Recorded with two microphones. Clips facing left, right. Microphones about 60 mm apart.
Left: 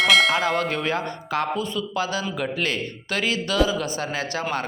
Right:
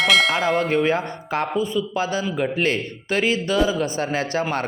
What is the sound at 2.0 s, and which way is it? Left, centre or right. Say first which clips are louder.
A man's voice: right 3 dB; right.